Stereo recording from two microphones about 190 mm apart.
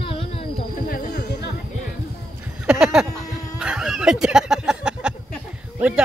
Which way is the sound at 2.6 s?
5° right (ahead or behind).